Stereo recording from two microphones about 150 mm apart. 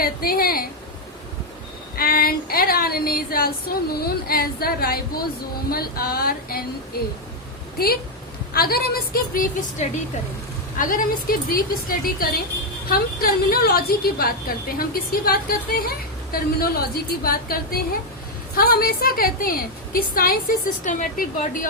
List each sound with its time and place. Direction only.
0.0 s speech: 80° left
2.0 s a sound: 80° left
5.7 s a woman's voice: 90° left
8.5 s a woman's voice: 90° left; by 21.7 s 65° left (ahead or behind)